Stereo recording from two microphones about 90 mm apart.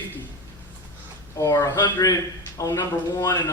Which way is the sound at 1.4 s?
35° left (ahead or behind).